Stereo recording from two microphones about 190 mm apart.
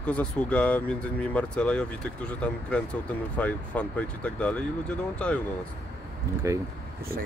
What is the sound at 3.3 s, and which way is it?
Speech, 5° left (ahead or behind).